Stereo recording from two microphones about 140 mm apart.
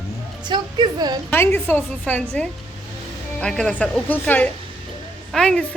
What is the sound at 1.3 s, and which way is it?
A woman's voice, 15° left (ahead or behind).